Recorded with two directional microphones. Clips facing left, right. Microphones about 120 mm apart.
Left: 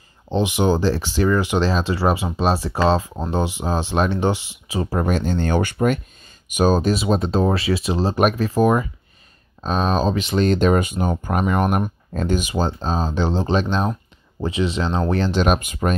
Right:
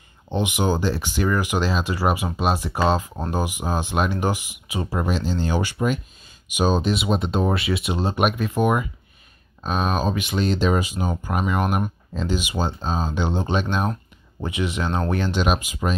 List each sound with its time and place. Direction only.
0.3 s speech: 25° left (ahead or behind)
4.8 s speech: 45° left (ahead or behind)